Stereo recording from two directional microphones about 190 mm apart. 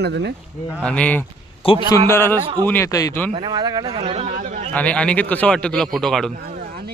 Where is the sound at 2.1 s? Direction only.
15° left (ahead or behind).